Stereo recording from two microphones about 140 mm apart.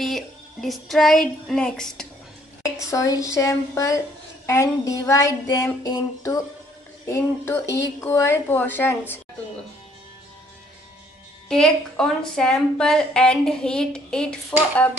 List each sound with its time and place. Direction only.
0.0 s a sound: centre (ahead or behind)
2.6 s child singing: 25° left (ahead or behind)
7.1 s speech: 20° left (ahead or behind)
11.4 s a woman's voice: 5° left (ahead or behind)